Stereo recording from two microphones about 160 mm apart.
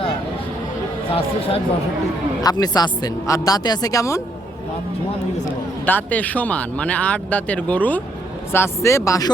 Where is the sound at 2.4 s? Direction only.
25° left (ahead or behind).